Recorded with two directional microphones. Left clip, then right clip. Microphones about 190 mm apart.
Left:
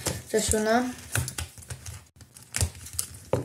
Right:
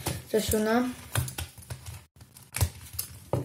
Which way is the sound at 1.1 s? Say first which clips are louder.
Left 2 dB; 15° left (ahead or behind).